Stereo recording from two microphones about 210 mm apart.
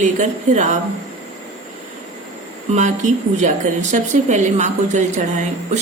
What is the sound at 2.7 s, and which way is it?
A woman's voice, 35° right (ahead or behind).